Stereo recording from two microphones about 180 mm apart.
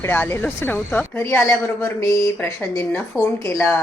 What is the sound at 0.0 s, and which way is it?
Speech, 10° left (ahead or behind).